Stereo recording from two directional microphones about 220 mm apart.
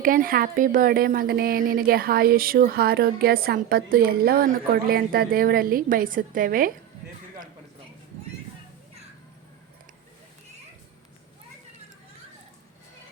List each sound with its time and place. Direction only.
0.0 s speech: 40° right (ahead or behind)